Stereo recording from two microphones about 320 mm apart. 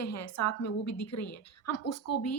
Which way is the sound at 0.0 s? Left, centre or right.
Left.